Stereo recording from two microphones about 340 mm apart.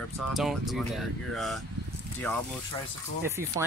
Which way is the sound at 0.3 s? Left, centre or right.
Centre.